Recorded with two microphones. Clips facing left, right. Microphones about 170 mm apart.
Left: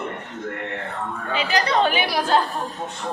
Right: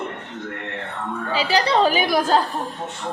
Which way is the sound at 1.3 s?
35° right (ahead or behind).